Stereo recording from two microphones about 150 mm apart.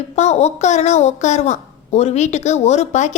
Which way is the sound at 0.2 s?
45° left (ahead or behind).